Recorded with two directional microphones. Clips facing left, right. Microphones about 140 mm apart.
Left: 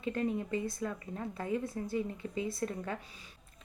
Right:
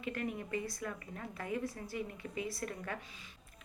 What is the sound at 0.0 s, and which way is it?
Speech, 25° left (ahead or behind).